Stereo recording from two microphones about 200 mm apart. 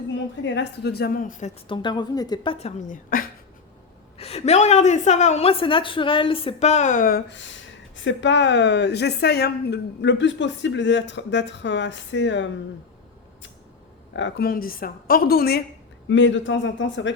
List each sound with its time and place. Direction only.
0.1 s a woman's voice: 65° left (ahead or behind); by 1.5 s 40° left (ahead or behind)
1.6 s speech: 25° left (ahead or behind); by 3.2 s 40° left (ahead or behind)
4.2 s a woman's voice: 30° left (ahead or behind); by 12.5 s 65° left (ahead or behind)
14.2 s a woman's voice: 60° left (ahead or behind)
16.0 s a man's voice: 65° left (ahead or behind)